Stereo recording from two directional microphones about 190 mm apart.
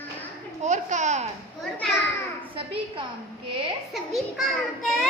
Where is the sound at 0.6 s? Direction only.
40° right (ahead or behind).